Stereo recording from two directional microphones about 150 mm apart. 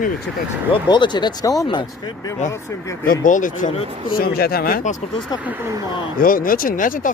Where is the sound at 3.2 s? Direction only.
60° left (ahead or behind).